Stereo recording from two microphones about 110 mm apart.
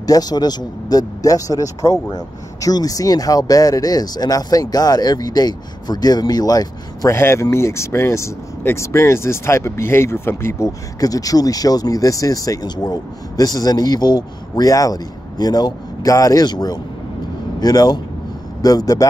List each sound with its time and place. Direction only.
0.0 s speech: 35° left (ahead or behind)
7.2 s speech: 25° left (ahead or behind)